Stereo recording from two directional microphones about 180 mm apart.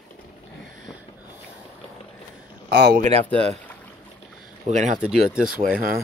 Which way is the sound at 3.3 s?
5° left (ahead or behind).